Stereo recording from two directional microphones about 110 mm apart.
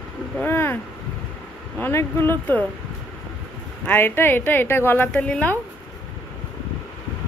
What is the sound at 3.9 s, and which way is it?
A woman's voice, 20° left (ahead or behind).